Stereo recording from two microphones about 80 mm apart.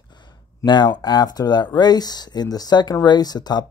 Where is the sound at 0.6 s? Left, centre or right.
Left.